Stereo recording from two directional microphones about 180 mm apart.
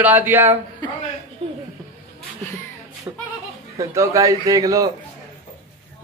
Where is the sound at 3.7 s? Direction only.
15° right (ahead or behind).